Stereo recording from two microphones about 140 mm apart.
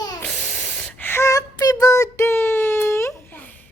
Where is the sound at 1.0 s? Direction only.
15° left (ahead or behind).